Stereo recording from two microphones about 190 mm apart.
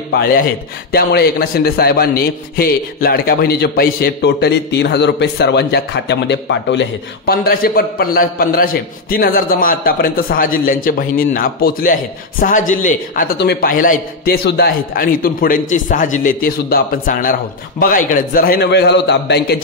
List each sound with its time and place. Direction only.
0.1 s a man's voice: 55° left (ahead or behind)